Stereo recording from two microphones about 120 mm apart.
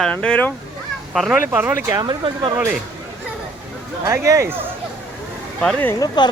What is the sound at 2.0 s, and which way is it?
Speech, 40° right (ahead or behind).